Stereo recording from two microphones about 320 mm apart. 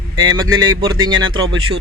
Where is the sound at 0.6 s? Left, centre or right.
Centre.